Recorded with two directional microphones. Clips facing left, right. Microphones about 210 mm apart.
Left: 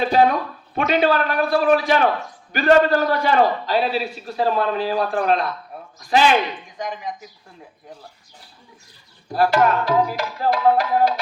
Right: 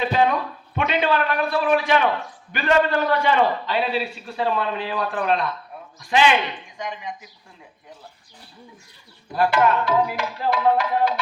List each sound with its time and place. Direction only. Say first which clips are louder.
0.0 s a sound: left 3 dB; 40° left (ahead or behind)
0.8 s a man's voice: left 3 dB; 40° left (ahead or behind)
9.3 s a man's voice: left 2 dB; 40° left (ahead or behind)